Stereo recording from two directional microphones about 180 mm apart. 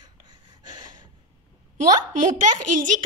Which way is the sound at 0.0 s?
25° right (ahead or behind).